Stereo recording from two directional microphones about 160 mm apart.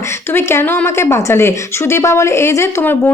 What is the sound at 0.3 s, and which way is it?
A woman's voice, 15° left (ahead or behind).